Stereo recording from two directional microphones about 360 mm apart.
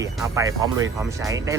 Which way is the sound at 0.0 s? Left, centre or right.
Centre.